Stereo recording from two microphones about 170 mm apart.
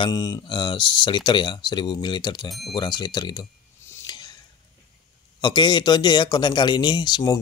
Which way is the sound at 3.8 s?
25° left (ahead or behind).